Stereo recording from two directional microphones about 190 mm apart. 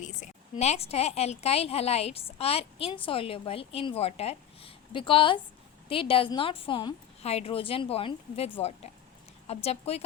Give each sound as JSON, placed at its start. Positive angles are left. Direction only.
{"t": 0.0, "sound": "a sound", "side_deg": 40}
{"t": 0.6, "sound": "a woman's voice", "side_deg": 35}
{"t": 9.5, "sound": "a woman's voice", "side_deg": 35}